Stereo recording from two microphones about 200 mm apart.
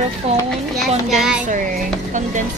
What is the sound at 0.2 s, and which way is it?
Speech, 30° right (ahead or behind).